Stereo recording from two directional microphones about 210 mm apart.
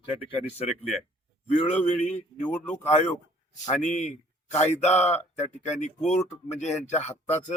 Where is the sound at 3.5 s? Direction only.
35° left (ahead or behind).